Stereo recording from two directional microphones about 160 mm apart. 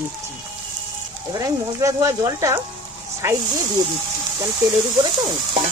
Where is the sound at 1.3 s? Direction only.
20° right (ahead or behind).